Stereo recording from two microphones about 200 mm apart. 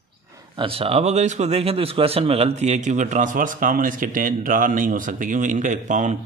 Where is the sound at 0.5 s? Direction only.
30° right (ahead or behind).